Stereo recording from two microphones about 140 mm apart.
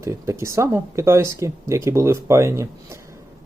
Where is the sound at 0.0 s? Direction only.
20° right (ahead or behind).